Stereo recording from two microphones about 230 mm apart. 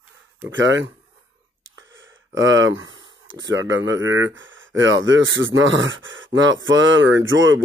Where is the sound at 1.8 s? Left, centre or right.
Right.